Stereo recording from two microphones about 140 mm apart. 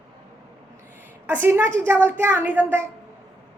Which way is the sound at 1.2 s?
15° right (ahead or behind).